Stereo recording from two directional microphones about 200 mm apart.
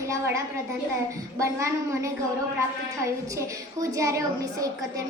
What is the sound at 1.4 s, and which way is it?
A woman's voice, 15° right (ahead or behind).